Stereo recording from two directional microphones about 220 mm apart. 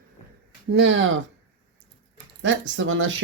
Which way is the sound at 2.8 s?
60° right (ahead or behind).